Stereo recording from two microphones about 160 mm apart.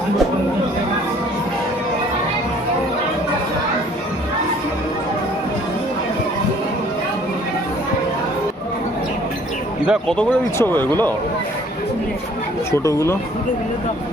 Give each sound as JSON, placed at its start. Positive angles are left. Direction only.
{"t": 9.8, "sound": "speech", "side_deg": -5}
{"t": 10.2, "sound": "speech", "side_deg": 10}
{"t": 12.7, "sound": "speech", "side_deg": 20}